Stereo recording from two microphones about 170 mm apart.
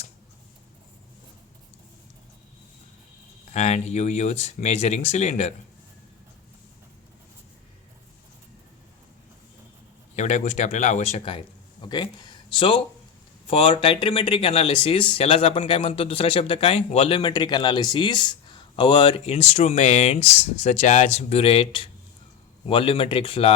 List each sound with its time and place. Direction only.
3.5 s speech: 40° left (ahead or behind)
10.2 s speech: 45° left (ahead or behind)
17.2 s speech: 25° left (ahead or behind)